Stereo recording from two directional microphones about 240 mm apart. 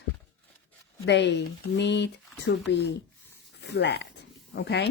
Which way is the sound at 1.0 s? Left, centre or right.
Left.